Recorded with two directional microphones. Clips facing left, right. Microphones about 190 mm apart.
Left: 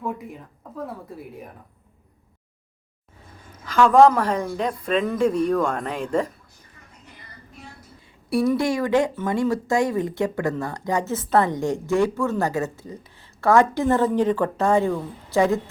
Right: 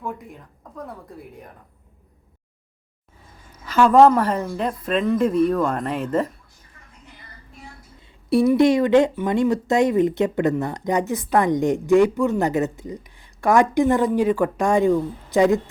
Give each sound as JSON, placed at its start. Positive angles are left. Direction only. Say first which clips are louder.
{"t": 0.0, "sound": "a woman's voice", "louder": "left 2 dB", "side_deg": 0}
{"t": 3.7, "sound": "a woman's voice", "louder": "right 1 dB", "side_deg": -5}
{"t": 8.3, "sound": "speech", "louder": "right 5 dB", "side_deg": -20}